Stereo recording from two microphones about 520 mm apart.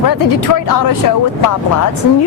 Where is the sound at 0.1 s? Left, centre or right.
Left.